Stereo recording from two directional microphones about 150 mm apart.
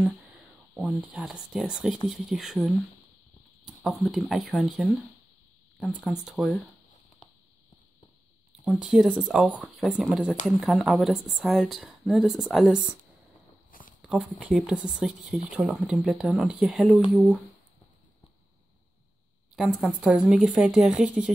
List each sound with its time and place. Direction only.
0.7 s speech: centre (ahead or behind)
8.6 s speech: centre (ahead or behind)
13.7 s a sound: 65° left (ahead or behind)
14.0 s speech: 5° right (ahead or behind)
19.5 s speech: centre (ahead or behind)